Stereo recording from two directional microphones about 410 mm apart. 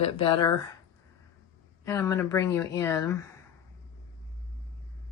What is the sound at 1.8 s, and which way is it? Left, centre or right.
A woman's voice, centre.